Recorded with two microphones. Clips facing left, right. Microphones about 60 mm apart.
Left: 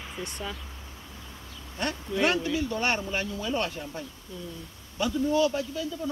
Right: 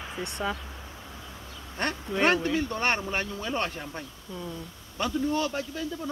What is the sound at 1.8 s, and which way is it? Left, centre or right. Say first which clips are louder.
Speech: right 1 dB; right.